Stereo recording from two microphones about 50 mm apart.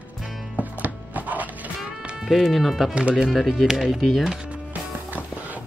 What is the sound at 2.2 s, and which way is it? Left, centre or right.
Music, centre.